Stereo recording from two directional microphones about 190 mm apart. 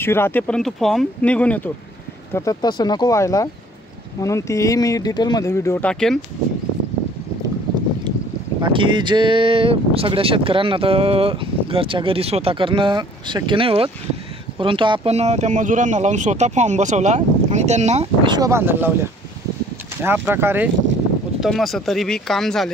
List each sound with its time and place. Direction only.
0.0 s speech: 10° left (ahead or behind)
2.3 s speech: 20° left (ahead or behind)
8.5 s speech: 25° right (ahead or behind)
20.0 s speech: 10° right (ahead or behind)
21.4 s speech: centre (ahead or behind)